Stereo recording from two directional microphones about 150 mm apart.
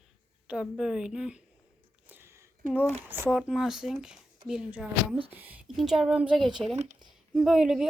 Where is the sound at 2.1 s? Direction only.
15° right (ahead or behind).